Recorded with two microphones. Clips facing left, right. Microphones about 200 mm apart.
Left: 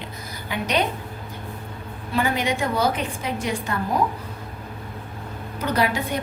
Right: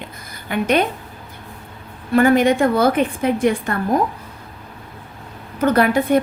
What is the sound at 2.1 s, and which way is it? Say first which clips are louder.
A woman's voice: right 10 dB; 50° right (ahead or behind).